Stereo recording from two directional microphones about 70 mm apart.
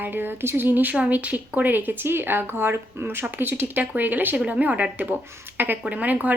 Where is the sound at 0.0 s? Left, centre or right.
Right.